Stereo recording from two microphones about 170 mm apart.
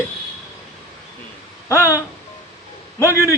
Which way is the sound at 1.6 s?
15° left (ahead or behind).